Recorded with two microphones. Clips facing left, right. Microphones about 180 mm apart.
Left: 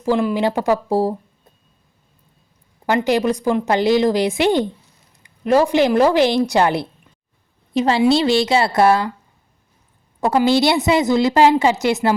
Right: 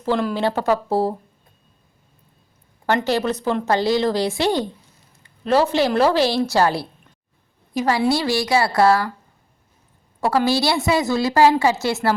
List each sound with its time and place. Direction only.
0.0 s a woman's voice: 5° left (ahead or behind)
2.8 s a woman's voice: 15° left (ahead or behind)
10.2 s a woman's voice: 20° left (ahead or behind)